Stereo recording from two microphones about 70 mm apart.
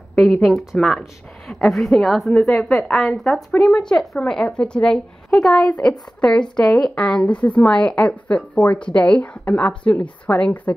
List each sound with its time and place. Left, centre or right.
0.1 s a woman's voice: centre; by 10.7 s left